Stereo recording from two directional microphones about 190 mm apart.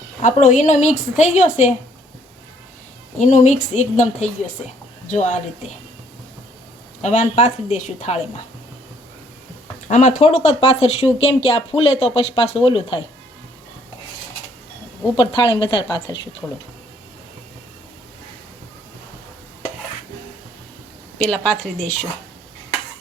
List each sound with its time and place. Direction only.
0.2 s speech: 40° left (ahead or behind)
3.2 s speech: 40° left (ahead or behind)
7.0 s speech: 35° left (ahead or behind)
9.9 s speech: 40° left (ahead or behind)
15.1 s a woman's voice: 25° left (ahead or behind)
16.4 s speech: 5° left (ahead or behind)
21.2 s a woman's voice: 5° left (ahead or behind)